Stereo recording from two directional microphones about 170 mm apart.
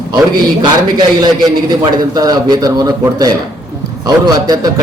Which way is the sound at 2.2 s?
25° right (ahead or behind).